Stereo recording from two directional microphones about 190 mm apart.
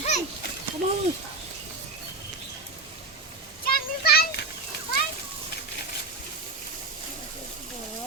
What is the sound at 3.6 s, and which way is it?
Children playing, 55° left (ahead or behind).